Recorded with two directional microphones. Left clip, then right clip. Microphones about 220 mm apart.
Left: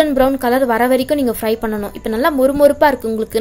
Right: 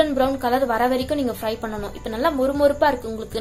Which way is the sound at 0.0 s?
40° left (ahead or behind).